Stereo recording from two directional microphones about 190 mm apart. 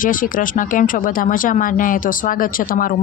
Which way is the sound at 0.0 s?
45° left (ahead or behind).